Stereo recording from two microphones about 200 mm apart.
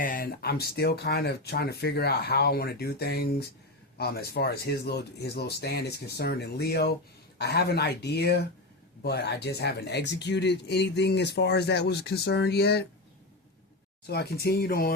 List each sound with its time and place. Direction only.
0.0 s speech: 45° left (ahead or behind)
14.1 s speech: 50° left (ahead or behind)